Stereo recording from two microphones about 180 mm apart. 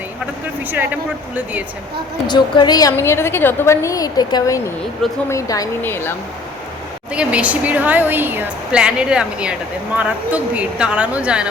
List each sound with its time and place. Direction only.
2.2 s a woman's voice: 25° left (ahead or behind)
7.1 s a woman's voice: 5° right (ahead or behind)